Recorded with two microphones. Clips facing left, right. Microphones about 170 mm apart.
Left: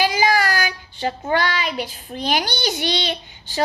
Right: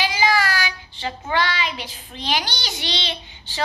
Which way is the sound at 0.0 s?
45° left (ahead or behind).